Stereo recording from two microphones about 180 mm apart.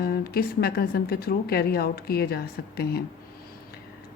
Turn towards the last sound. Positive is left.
turn(degrees=60)  # may be behind; listen again after turning